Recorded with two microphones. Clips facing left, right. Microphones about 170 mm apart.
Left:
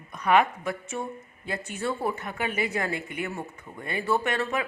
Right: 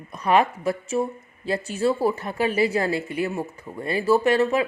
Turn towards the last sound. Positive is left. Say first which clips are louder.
# right 8 dB
turn(degrees=-25)  # may be behind; listen again after turning